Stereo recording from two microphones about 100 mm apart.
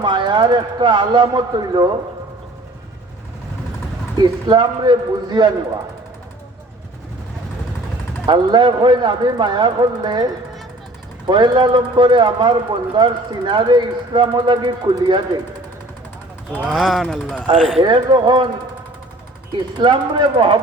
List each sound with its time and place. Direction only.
0.0 s speech: 50° right (ahead or behind)
4.2 s speech: 50° right (ahead or behind)
8.3 s speech: 50° right (ahead or behind)
11.3 s speech: 50° right (ahead or behind)
16.5 s speech: 10° right (ahead or behind)
17.8 s speech: 50° right (ahead or behind)
19.5 s speech: 50° right (ahead or behind)